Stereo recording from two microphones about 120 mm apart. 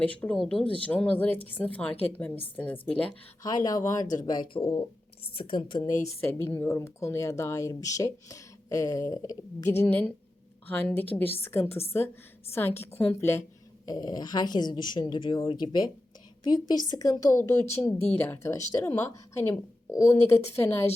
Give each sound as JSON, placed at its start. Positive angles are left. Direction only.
{"t": 0.0, "sound": "speech", "side_deg": 10}
{"t": 3.4, "sound": "speech", "side_deg": 30}
{"t": 9.6, "sound": "speech", "side_deg": 20}
{"t": 13.8, "sound": "speech", "side_deg": 35}